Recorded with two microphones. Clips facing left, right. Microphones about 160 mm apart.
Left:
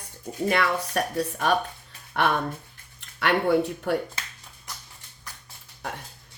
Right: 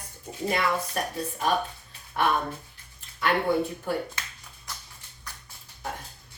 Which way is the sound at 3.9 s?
75° left (ahead or behind).